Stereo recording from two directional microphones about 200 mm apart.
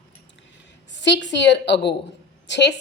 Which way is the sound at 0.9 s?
60° left (ahead or behind).